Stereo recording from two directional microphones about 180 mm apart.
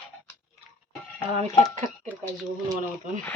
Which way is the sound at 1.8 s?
40° right (ahead or behind).